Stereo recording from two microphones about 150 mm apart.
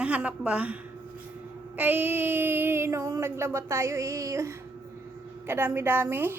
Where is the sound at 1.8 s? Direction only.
10° right (ahead or behind).